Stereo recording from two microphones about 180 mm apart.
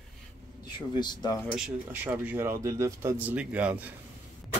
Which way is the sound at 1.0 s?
25° left (ahead or behind).